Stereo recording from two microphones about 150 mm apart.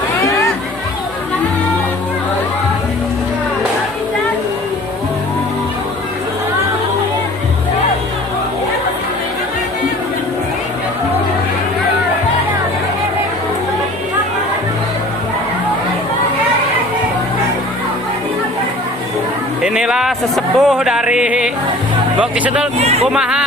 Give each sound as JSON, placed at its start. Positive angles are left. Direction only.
{"t": 19.6, "sound": "speech", "side_deg": -5}
{"t": 22.8, "sound": "a sound", "side_deg": -45}
{"t": 23.0, "sound": "speech", "side_deg": -5}